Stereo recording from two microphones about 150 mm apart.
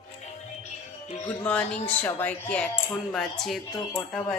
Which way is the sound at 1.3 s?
10° left (ahead or behind).